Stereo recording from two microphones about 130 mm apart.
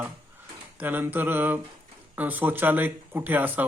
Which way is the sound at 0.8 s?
15° right (ahead or behind).